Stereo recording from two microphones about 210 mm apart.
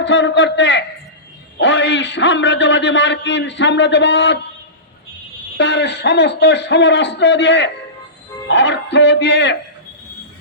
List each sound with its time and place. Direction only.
0.0 s a man's voice: 60° left (ahead or behind)
5.5 s a man's voice: 55° left (ahead or behind)